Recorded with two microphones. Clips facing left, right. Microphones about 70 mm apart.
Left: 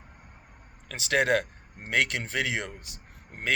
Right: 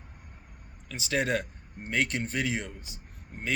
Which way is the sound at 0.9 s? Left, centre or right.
Left.